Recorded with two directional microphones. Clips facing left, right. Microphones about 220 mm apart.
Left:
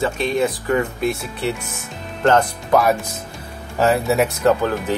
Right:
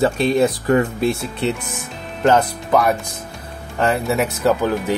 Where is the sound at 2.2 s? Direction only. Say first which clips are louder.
Right 1 dB; 5° right (ahead or behind).